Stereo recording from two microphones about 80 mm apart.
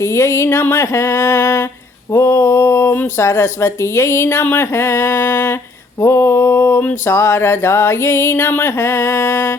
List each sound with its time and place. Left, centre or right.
0.0 s music: left
2.1 s male singing: left
3.0 s music: left